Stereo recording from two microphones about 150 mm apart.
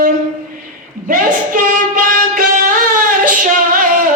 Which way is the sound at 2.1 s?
70° right (ahead or behind).